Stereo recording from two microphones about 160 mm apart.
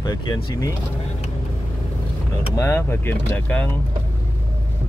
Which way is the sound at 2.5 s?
20° left (ahead or behind).